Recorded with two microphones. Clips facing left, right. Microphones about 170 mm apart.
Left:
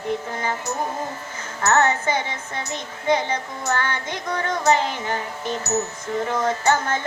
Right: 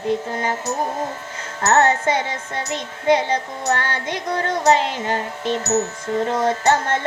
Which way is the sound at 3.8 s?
30° right (ahead or behind).